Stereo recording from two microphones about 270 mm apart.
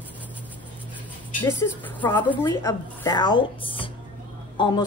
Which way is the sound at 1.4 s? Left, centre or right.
Centre.